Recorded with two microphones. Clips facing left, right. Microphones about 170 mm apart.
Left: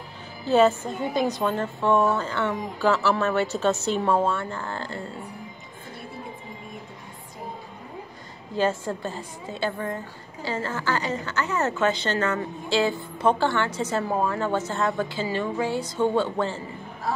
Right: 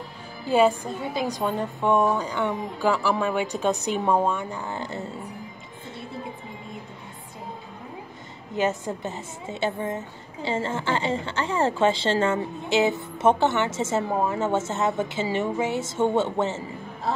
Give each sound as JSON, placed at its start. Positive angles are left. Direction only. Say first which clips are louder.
{"t": 0.5, "sound": "a woman's voice", "louder": "left 1 dB", "side_deg": -10}
{"t": 8.5, "sound": "a woman's voice", "louder": "left 1 dB", "side_deg": -20}